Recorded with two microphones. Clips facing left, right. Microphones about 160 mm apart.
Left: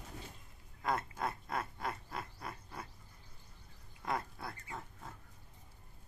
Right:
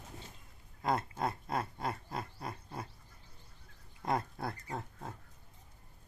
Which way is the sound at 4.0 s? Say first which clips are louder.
Right 4 dB; 35° right (ahead or behind).